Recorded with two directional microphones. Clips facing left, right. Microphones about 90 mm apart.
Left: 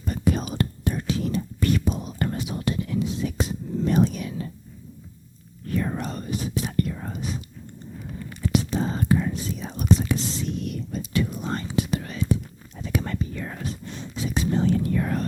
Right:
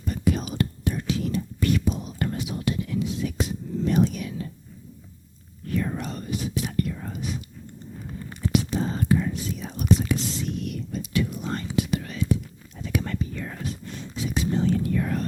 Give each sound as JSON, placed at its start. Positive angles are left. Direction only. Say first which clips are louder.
{"t": 0.0, "sound": "whispering", "louder": "left 1 dB", "side_deg": 40}
{"t": 5.6, "sound": "whispering", "louder": "left 1 dB", "side_deg": 40}
{"t": 8.5, "sound": "whispering", "louder": "even", "side_deg": 35}